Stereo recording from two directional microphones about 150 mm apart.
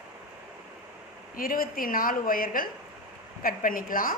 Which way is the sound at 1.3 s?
75° left (ahead or behind).